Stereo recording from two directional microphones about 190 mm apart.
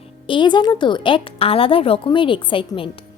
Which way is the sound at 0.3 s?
25° left (ahead or behind).